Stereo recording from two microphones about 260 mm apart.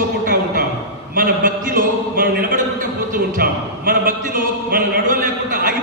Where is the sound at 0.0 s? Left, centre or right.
Right.